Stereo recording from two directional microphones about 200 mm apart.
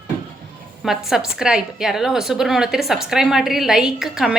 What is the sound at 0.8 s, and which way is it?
A woman's voice, centre (ahead or behind).